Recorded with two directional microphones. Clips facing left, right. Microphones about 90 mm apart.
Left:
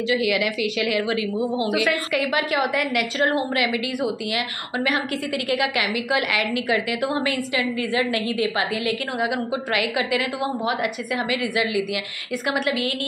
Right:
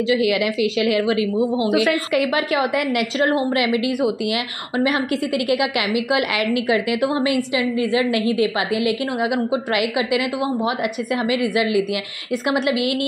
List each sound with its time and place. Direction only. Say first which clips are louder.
0.1 s a woman's voice: right 3 dB; 25° right (ahead or behind)